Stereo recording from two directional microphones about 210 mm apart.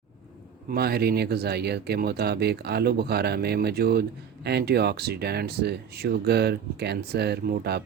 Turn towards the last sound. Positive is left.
turn(degrees=-50)  # may be behind; listen again after turning